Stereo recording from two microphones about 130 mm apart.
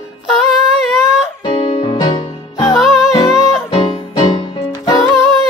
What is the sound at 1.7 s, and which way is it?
Music, 35° left (ahead or behind).